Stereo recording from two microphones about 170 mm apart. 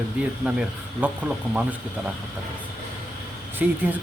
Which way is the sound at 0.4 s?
5° right (ahead or behind).